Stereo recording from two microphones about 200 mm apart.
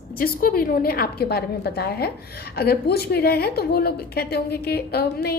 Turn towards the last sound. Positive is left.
turn(degrees=50)  # may be behind; listen again after turning